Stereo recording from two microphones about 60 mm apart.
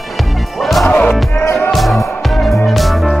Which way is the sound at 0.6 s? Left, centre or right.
Centre.